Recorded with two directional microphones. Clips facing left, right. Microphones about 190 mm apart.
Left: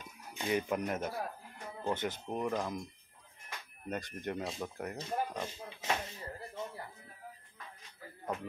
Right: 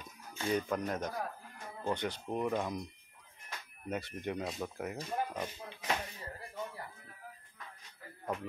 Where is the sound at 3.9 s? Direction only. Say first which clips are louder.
Right 1 dB; centre (ahead or behind).